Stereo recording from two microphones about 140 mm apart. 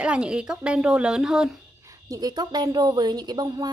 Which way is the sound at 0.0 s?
10° right (ahead or behind).